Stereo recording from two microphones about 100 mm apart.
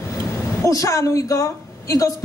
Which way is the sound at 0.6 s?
30° left (ahead or behind).